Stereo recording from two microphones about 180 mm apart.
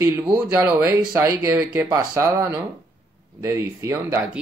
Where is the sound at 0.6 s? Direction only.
15° right (ahead or behind).